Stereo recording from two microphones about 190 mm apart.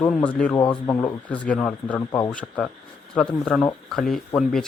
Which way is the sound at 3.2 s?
Centre (ahead or behind).